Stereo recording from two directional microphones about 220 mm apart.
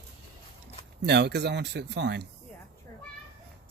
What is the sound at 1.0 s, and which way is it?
Speech, 50° right (ahead or behind).